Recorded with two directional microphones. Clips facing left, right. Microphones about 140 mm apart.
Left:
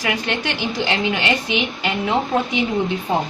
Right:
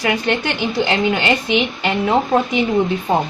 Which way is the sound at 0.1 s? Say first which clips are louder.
Right 4 dB; 30° right (ahead or behind).